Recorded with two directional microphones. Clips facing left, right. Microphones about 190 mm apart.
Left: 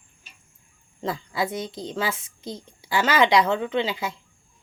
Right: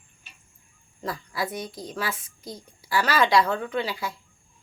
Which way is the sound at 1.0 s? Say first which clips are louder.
Left 3 dB; 25° left (ahead or behind).